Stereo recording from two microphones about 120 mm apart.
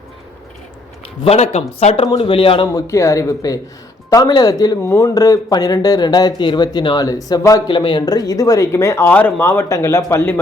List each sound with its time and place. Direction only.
1.2 s speech: 60° left (ahead or behind)
2.0 s speech: 45° left (ahead or behind)
2.7 s speech: 25° left (ahead or behind)